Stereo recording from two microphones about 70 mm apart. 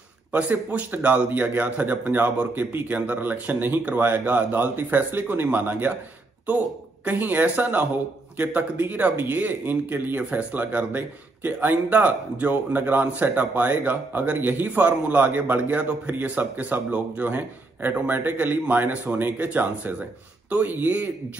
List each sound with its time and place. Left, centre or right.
0.3 s a man's voice: right
7.1 s a man's voice: right